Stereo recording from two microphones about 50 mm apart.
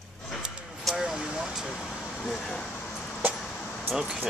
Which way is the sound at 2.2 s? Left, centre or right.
Centre.